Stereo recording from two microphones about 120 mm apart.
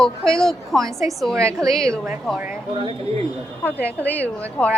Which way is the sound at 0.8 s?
25° right (ahead or behind).